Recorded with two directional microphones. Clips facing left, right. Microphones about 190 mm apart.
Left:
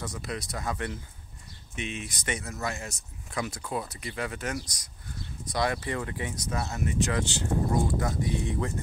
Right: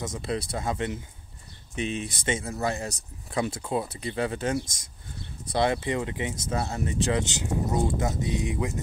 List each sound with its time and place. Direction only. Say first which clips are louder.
0.0 s speech: right 5 dB; 25° right (ahead or behind)
1.8 s speech: right 6 dB; 35° right (ahead or behind); by 8.7 s 15° right (ahead or behind)